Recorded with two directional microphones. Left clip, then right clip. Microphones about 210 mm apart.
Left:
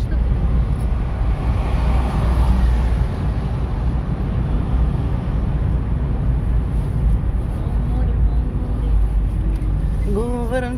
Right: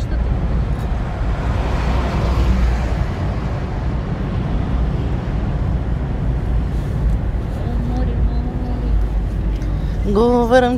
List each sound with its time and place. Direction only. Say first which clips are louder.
10.1 s speech: right 10 dB; 25° right (ahead or behind)